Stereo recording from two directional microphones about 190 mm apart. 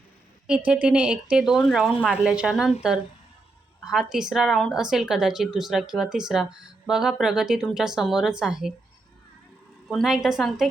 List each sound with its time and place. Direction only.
0.4 s speech: 5° right (ahead or behind)
3.8 s speech: 5° right (ahead or behind)
9.9 s speech: centre (ahead or behind)